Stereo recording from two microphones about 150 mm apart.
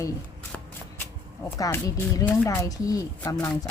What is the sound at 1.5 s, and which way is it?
A woman's voice, 25° left (ahead or behind).